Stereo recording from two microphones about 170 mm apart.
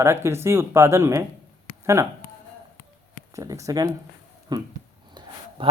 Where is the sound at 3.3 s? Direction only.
20° right (ahead or behind).